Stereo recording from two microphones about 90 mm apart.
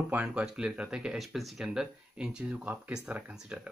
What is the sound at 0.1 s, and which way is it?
Speech, 15° right (ahead or behind).